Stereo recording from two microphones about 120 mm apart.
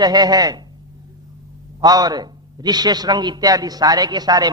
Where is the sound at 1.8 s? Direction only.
35° right (ahead or behind).